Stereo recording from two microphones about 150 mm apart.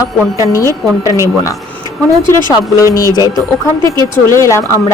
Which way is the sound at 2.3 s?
20° left (ahead or behind).